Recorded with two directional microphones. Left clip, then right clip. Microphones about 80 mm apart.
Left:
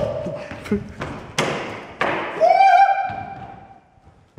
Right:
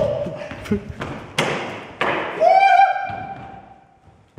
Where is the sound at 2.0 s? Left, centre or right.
Centre.